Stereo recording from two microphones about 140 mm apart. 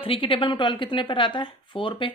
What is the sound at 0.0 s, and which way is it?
Speech, 40° left (ahead or behind).